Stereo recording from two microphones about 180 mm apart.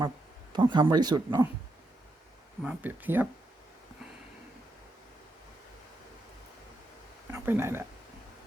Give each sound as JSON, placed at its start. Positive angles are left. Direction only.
{"t": 0.5, "sound": "speech", "side_deg": -25}
{"t": 2.6, "sound": "speech", "side_deg": -10}
{"t": 7.3, "sound": "speech", "side_deg": -15}